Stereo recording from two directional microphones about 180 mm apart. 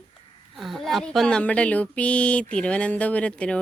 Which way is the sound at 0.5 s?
Centre (ahead or behind).